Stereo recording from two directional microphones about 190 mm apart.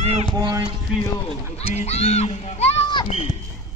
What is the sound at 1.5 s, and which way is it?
Speech, 35° left (ahead or behind).